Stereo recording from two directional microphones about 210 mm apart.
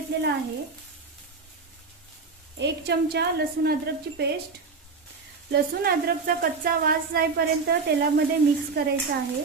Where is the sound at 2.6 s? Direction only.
50° right (ahead or behind).